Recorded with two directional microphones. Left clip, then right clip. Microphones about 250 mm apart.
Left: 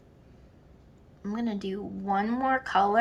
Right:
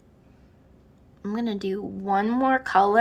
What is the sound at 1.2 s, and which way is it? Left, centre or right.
A woman's voice, right.